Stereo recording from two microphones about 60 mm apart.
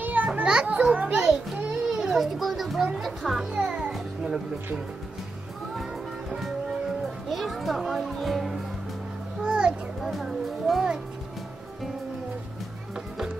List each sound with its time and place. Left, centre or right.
0.0 s children playing: right
0.3 s children playing: centre
1.9 s music: centre
3.5 s music: centre
7.2 s music: centre
9.4 s a sound: centre
10.0 s music: centre